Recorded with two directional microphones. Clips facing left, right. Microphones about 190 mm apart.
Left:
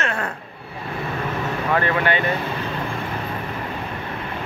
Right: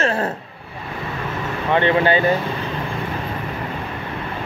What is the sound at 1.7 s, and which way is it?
Speech, 25° right (ahead or behind).